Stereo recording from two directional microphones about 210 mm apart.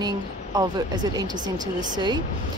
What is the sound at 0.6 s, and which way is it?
Speech, 20° right (ahead or behind).